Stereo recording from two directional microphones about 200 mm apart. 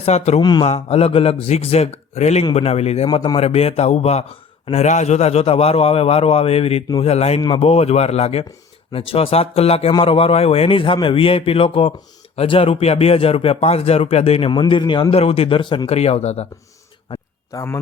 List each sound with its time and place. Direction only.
0.0 s a man's voice: 35° left (ahead or behind)
0.4 s a man's voice: 20° left (ahead or behind)
17.5 s a man's voice: 15° left (ahead or behind)